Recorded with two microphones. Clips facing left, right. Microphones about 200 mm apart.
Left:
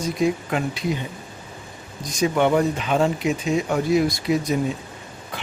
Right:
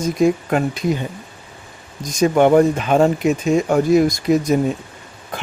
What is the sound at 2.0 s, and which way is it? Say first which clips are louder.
Speech: right 6 dB; 45° right (ahead or behind).